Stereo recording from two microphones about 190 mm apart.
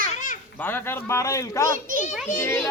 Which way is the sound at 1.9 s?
45° right (ahead or behind).